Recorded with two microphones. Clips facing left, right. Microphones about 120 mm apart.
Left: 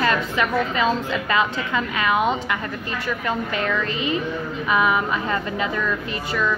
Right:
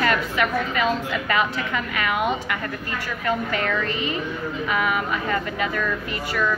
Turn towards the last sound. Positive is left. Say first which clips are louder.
# left 1 dB
turn(degrees=25)  # may be behind; listen again after turning